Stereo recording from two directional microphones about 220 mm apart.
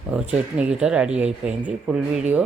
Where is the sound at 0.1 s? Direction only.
5° right (ahead or behind).